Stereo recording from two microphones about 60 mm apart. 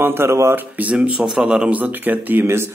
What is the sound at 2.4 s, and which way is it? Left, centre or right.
Speech, right.